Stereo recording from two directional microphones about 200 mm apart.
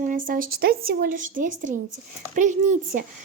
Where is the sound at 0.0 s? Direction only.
40° right (ahead or behind).